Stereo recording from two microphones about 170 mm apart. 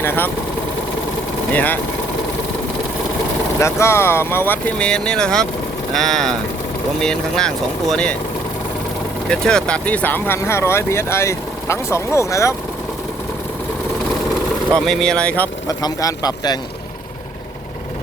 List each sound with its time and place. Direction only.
0.0 s speech: 15° left (ahead or behind)
1.5 s speech: 10° left (ahead or behind)
3.6 s speech: 15° left (ahead or behind)
9.3 s speech: 5° left (ahead or behind)
14.8 s speech: 5° left (ahead or behind)
15.6 s speech: 20° left (ahead or behind)